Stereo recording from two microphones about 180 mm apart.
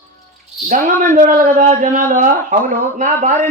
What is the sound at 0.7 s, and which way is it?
A man's voice, 50° right (ahead or behind).